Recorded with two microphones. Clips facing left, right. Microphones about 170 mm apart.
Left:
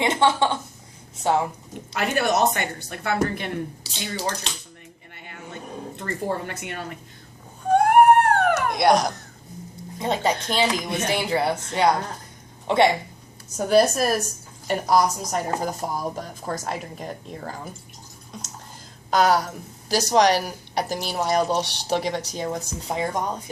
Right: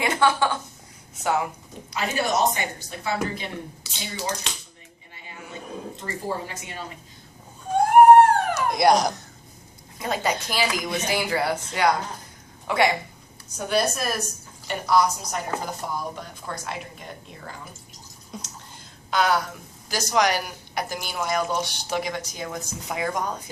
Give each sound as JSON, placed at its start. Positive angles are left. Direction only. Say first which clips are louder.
{"t": 0.0, "sound": "a woman's voice", "louder": "left 1 dB", "side_deg": 25}
{"t": 1.9, "sound": "a woman's voice", "louder": "left 3 dB", "side_deg": 60}
{"t": 3.9, "sound": "speech", "louder": "left 3 dB", "side_deg": 35}
{"t": 5.1, "sound": "a sound", "louder": "left 1 dB", "side_deg": 60}
{"t": 6.0, "sound": "a woman's voice", "louder": "left 4 dB", "side_deg": 60}
{"t": 7.8, "sound": "dog", "louder": "right 3 dB", "side_deg": 60}
{"t": 8.7, "sound": "speech", "louder": "right 3 dB", "side_deg": 0}
{"t": 10.0, "sound": "speech", "louder": "left 2 dB", "side_deg": 25}
{"t": 13.6, "sound": "speech", "louder": "left 6 dB", "side_deg": 40}
{"t": 19.1, "sound": "speech", "louder": "left 3 dB", "side_deg": 40}